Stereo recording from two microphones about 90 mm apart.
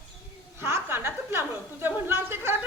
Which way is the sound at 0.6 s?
25° right (ahead or behind).